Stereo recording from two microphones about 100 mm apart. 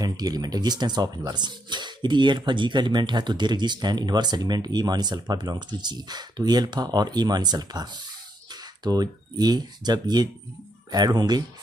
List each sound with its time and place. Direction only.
0.0 s speech: 40° right (ahead or behind)